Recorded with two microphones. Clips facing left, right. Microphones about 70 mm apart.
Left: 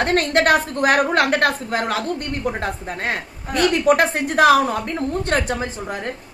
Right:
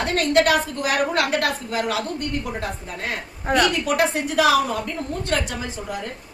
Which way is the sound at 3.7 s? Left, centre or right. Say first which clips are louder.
Left 5 dB; left.